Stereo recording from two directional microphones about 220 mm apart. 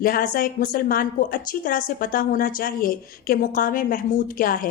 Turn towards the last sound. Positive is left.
turn(degrees=40)  # may be behind; listen again after turning